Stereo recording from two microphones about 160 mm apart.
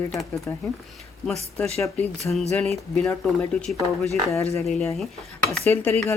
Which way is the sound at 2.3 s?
15° left (ahead or behind).